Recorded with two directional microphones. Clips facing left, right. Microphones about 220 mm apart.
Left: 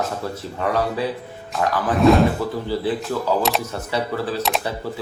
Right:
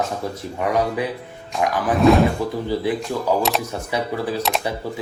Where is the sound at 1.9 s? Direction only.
Centre (ahead or behind).